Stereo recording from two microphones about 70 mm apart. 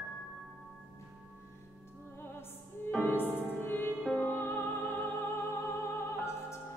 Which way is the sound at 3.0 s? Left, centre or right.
Left.